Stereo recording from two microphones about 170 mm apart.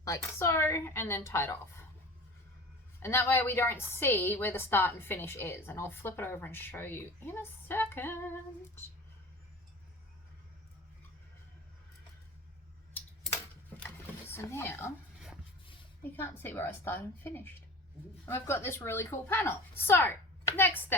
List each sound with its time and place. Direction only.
0.0 s a woman's voice: 15° left (ahead or behind)
3.0 s a woman's voice: 15° left (ahead or behind)
13.8 s a sound: 15° left (ahead or behind)
16.2 s a woman's voice: 10° left (ahead or behind)